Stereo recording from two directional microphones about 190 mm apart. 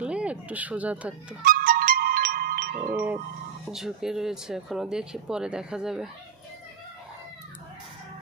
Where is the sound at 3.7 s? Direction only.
Centre (ahead or behind).